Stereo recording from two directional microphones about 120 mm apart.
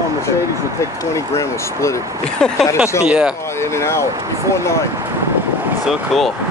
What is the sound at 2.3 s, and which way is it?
Speech, 5° left (ahead or behind).